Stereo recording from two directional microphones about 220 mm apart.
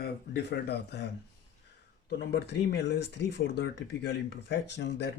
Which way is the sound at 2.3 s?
50° left (ahead or behind).